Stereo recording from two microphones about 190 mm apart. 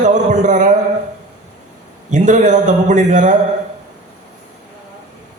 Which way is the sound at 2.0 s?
40° right (ahead or behind).